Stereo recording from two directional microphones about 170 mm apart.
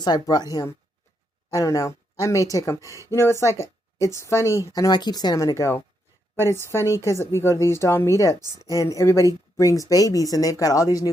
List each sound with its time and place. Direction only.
0.0 s speech: 25° left (ahead or behind)